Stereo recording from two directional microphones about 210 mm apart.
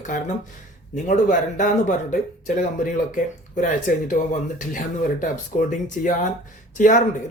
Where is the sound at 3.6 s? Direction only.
40° left (ahead or behind).